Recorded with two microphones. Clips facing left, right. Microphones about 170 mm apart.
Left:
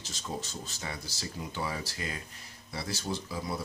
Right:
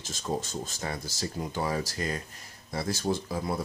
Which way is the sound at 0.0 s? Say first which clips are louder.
Right 6 dB; 50° right (ahead or behind).